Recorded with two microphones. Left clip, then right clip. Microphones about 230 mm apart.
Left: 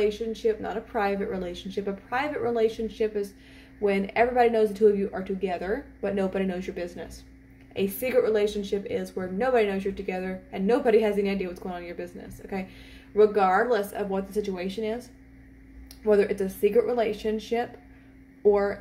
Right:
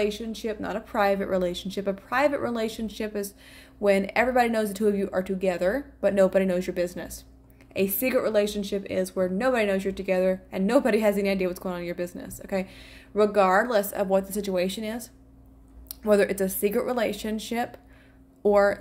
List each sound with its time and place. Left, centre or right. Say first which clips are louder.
0.0 s speech: left 3 dB; right